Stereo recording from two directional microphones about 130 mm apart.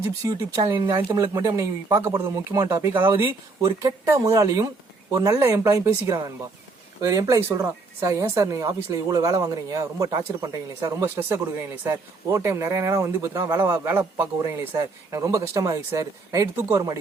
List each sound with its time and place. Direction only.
0.2 s speech: 30° right (ahead or behind)